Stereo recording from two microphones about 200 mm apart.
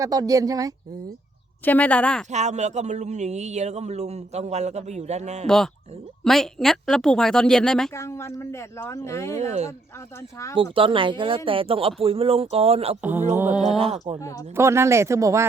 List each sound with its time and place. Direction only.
0.0 s speech: 15° right (ahead or behind)
1.6 s speech: 10° left (ahead or behind)
2.3 s a man's voice: 35° right (ahead or behind)
5.5 s speech: centre (ahead or behind)
9.3 s a man's voice: 35° right (ahead or behind)
13.0 s speech: 10° right (ahead or behind)
13.7 s a man's voice: 30° right (ahead or behind)
14.2 s speech: 15° left (ahead or behind)
14.5 s speech: 15° right (ahead or behind)